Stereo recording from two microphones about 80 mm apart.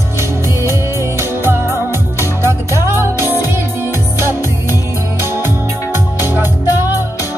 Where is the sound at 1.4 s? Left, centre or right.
Right.